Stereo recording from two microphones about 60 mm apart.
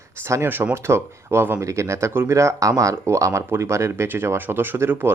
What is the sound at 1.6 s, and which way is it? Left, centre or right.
Speech, right.